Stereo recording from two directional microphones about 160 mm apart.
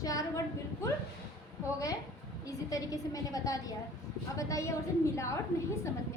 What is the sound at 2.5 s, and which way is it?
A woman's voice, 20° left (ahead or behind).